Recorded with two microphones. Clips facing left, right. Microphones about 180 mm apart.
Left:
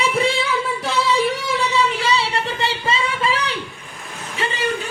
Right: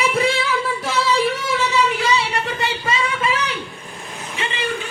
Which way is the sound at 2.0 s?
30° left (ahead or behind).